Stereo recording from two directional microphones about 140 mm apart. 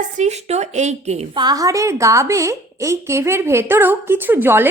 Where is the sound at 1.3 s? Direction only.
30° right (ahead or behind).